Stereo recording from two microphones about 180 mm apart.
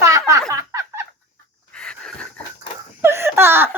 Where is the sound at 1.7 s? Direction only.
5° left (ahead or behind).